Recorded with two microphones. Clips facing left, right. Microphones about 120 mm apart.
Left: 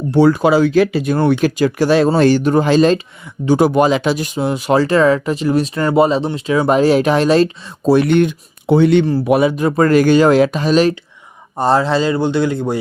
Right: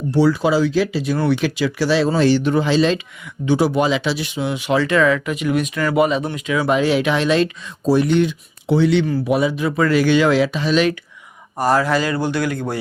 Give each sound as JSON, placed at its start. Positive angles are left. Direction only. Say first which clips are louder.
{"t": 0.1, "sound": "speech", "louder": "left 4 dB", "side_deg": 55}
{"t": 7.9, "sound": "speech", "louder": "left 4 dB", "side_deg": 65}
{"t": 11.5, "sound": "speech", "louder": "left 3 dB", "side_deg": 25}